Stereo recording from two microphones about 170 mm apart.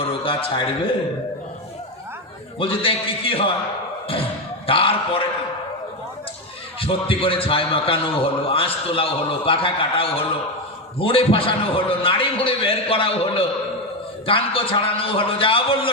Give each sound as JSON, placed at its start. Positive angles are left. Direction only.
{"t": 0.0, "sound": "a sound", "side_deg": 35}
{"t": 2.6, "sound": "a man's voice", "side_deg": 35}
{"t": 4.6, "sound": "a man's voice", "side_deg": 30}
{"t": 6.7, "sound": "a man's voice", "side_deg": 35}